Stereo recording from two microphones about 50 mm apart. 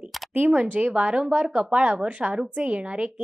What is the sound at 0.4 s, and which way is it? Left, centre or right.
A woman's voice, centre.